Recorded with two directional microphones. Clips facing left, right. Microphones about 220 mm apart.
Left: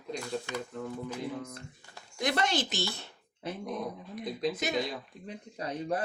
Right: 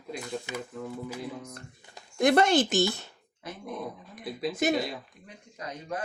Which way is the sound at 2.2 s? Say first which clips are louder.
Right 8 dB; 55° right (ahead or behind).